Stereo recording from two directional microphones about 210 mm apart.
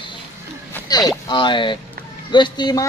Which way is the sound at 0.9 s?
20° left (ahead or behind).